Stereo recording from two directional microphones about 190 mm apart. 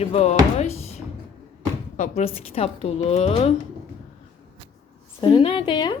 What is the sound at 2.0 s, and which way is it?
Speech, 35° left (ahead or behind).